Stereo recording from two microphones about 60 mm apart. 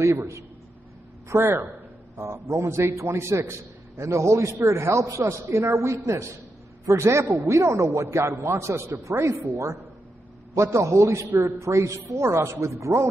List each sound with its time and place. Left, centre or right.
0.0 s a man's voice: right
1.4 s a man's voice: right
2.4 s a man's voice: right